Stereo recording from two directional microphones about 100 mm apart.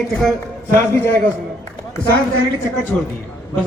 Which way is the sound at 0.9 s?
25° left (ahead or behind).